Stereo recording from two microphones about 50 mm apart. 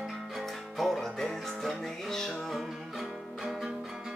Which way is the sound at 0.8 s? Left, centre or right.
Centre.